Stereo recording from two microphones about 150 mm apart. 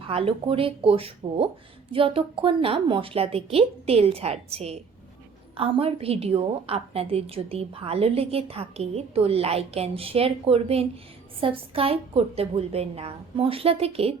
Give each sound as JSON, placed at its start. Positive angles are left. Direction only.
{"t": 0.1, "sound": "a woman's voice", "side_deg": -40}